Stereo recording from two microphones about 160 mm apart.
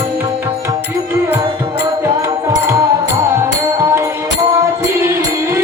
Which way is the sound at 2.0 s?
20° right (ahead or behind).